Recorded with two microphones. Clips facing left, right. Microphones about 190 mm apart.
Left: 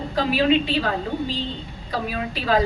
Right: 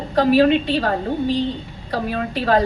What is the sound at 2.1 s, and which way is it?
Speech, 55° right (ahead or behind).